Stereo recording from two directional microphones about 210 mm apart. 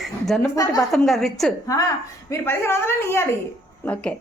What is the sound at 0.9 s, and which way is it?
A woman's voice, centre (ahead or behind).